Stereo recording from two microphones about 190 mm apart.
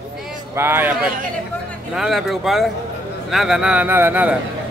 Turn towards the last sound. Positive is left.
turn(degrees=-10)  # may be behind; listen again after turning